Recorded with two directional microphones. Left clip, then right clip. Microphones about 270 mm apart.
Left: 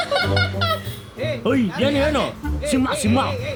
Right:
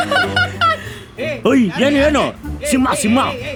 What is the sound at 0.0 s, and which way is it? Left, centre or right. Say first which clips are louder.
Music: right 5 dB; right.